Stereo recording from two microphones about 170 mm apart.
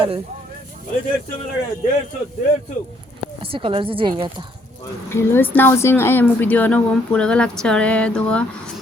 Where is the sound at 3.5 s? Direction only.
30° right (ahead or behind).